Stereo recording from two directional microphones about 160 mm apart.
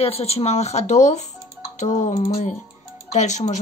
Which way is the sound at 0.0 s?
40° left (ahead or behind).